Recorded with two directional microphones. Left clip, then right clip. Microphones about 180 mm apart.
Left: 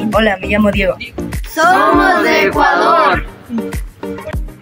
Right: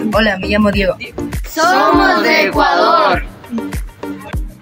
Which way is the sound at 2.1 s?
15° right (ahead or behind).